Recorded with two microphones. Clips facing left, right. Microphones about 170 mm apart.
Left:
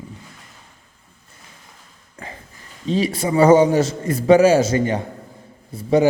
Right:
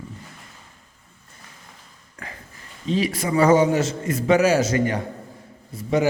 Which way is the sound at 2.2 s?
25° left (ahead or behind).